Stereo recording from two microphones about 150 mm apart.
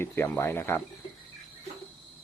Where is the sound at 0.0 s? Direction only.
15° left (ahead or behind).